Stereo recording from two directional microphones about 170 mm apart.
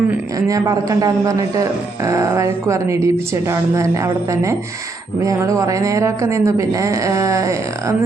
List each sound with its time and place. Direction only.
0.3 s speech: 20° right (ahead or behind)